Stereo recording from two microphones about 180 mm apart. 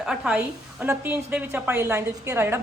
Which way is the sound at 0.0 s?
5° right (ahead or behind).